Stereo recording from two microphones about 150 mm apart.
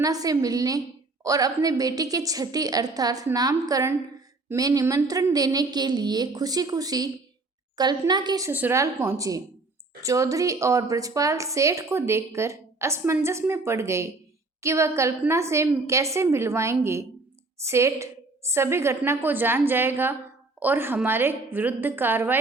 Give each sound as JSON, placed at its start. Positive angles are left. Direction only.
{"t": 0.0, "sound": "a woman's voice", "side_deg": -25}
{"t": 8.4, "sound": "a woman's voice", "side_deg": -15}